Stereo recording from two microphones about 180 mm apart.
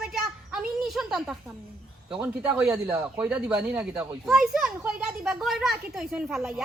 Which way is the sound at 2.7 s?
20° right (ahead or behind).